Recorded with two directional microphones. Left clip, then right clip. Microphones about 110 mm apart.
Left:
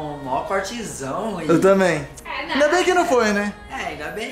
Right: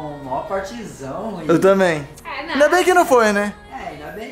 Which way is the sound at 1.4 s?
15° right (ahead or behind).